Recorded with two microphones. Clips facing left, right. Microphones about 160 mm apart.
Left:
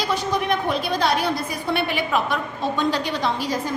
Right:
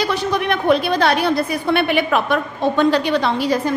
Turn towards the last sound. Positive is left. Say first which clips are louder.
# right 6 dB
turn(degrees=-65)  # may be behind; listen again after turning